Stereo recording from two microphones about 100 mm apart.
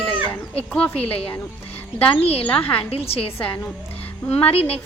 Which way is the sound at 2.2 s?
80° left.